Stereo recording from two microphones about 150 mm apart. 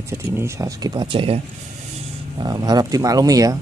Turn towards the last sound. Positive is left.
turn(degrees=-25)  # may be behind; listen again after turning